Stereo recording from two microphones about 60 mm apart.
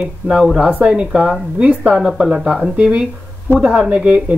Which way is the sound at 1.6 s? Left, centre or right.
Centre.